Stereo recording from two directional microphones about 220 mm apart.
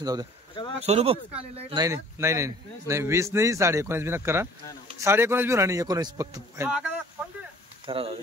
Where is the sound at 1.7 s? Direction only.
15° right (ahead or behind).